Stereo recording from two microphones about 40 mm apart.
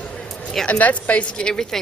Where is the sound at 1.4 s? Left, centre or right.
Centre.